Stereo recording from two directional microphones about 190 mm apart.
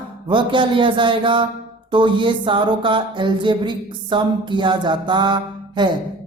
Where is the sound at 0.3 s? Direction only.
25° right (ahead or behind).